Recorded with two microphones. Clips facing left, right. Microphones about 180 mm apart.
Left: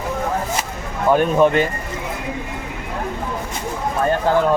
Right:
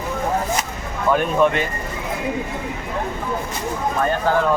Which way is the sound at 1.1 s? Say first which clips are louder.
Left 3 dB; 35° left (ahead or behind).